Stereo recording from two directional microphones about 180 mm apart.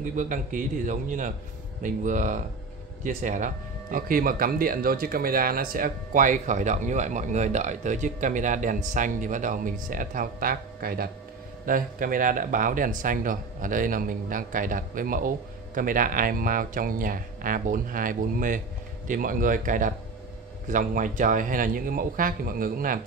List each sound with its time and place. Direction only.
0.0 s speech: 45° right (ahead or behind)